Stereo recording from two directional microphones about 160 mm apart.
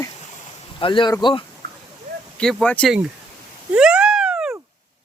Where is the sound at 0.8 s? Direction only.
30° left (ahead or behind).